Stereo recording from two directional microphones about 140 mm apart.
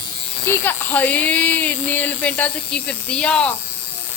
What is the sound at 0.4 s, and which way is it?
Speech, 15° left (ahead or behind).